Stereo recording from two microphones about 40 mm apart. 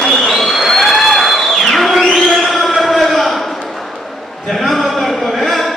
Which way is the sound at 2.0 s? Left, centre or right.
Centre.